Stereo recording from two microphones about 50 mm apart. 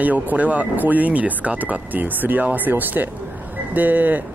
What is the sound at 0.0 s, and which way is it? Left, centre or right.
Speech, right.